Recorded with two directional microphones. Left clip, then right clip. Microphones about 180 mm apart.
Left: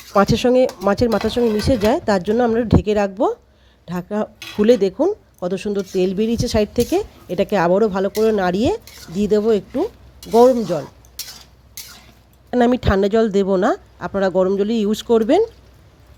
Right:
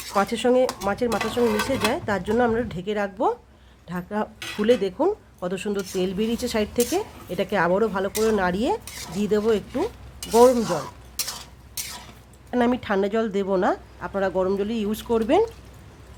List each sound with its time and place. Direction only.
0.2 s a woman's voice: 30° left (ahead or behind); by 10.6 s 15° left (ahead or behind)
12.5 s a woman's voice: 35° left (ahead or behind)